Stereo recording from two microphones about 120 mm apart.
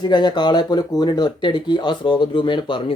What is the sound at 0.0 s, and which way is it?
Speech, 40° left (ahead or behind).